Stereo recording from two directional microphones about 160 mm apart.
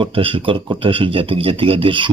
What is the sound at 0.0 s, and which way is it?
A man's voice, 35° right (ahead or behind).